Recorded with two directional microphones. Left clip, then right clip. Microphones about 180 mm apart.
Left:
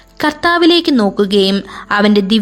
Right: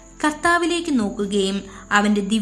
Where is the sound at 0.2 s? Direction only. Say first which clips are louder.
Left 7 dB; 40° left (ahead or behind).